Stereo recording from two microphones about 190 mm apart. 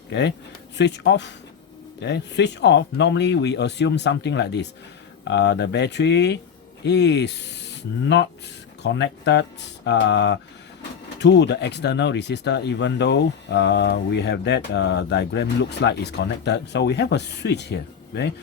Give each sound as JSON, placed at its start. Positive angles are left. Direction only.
{"t": 0.1, "sound": "speech", "side_deg": 65}